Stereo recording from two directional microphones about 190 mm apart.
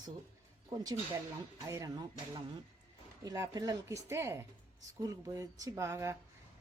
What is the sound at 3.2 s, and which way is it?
Speech, 20° right (ahead or behind).